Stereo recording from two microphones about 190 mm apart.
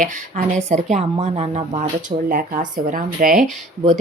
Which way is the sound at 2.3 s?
45° right (ahead or behind).